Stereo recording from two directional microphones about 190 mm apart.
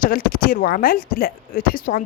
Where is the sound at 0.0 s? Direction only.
45° left (ahead or behind).